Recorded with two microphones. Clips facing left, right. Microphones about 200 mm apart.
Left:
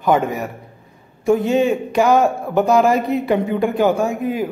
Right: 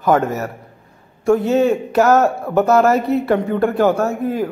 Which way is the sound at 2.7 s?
15° left (ahead or behind).